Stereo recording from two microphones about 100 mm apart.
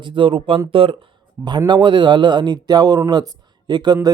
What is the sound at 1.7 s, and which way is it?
Speech, 50° right (ahead or behind).